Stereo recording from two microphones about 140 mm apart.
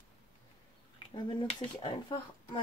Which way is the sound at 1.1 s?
35° left (ahead or behind).